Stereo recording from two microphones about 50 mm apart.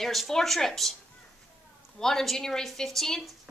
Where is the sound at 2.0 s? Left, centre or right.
Centre.